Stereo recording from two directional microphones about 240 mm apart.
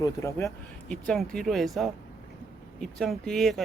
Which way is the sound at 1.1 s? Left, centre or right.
Centre.